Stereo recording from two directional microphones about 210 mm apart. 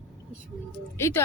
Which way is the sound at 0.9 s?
15° left (ahead or behind).